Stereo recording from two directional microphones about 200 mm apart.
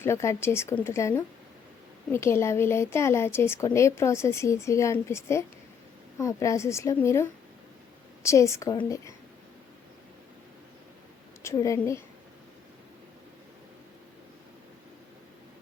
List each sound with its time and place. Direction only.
0.0 s a woman's voice: 15° left (ahead or behind)
11.4 s a woman's voice: 15° left (ahead or behind)